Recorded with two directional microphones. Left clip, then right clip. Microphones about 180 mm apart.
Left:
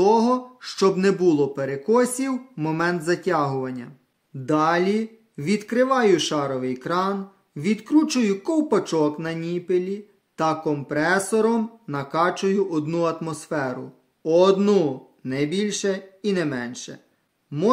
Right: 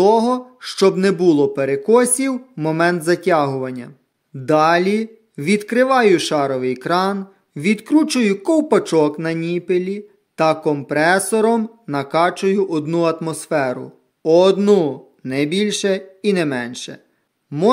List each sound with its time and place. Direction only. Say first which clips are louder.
0.0 s speech: right 4 dB; 35° right (ahead or behind)